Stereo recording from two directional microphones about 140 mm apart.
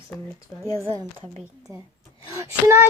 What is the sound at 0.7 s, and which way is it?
Speech, 20° right (ahead or behind).